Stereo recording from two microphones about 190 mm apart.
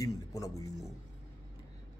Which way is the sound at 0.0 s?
20° left (ahead or behind).